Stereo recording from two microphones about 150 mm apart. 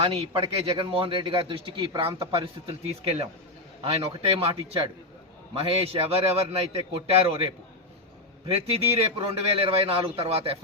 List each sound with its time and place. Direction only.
0.0 s a man's voice: 40° right (ahead or behind)